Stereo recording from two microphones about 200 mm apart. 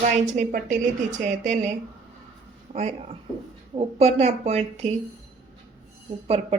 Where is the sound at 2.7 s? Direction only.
30° right (ahead or behind).